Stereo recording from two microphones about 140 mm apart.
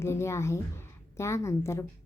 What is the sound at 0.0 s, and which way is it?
A woman's voice, 20° left (ahead or behind).